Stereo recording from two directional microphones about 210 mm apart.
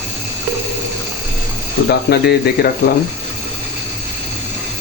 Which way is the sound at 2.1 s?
45° left (ahead or behind).